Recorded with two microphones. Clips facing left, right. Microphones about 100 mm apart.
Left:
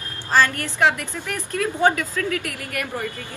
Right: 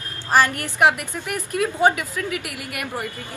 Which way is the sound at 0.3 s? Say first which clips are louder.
Right 1 dB; 15° right (ahead or behind).